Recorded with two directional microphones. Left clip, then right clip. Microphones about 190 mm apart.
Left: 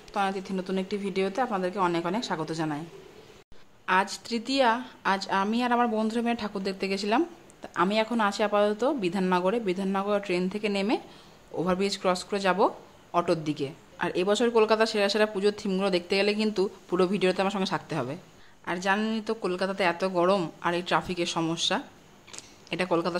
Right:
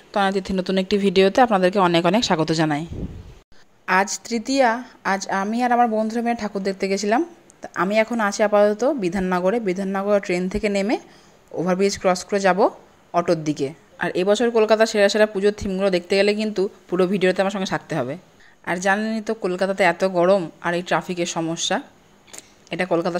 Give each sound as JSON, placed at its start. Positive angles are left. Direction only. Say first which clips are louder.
{"t": 0.1, "sound": "speech", "louder": "right 8 dB", "side_deg": -35}
{"t": 3.8, "sound": "speech", "louder": "right 6 dB", "side_deg": -25}
{"t": 22.3, "sound": "a sound", "louder": "right 4 dB", "side_deg": -15}